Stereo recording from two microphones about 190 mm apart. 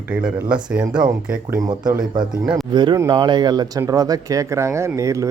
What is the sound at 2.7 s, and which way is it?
Speech, 25° right (ahead or behind).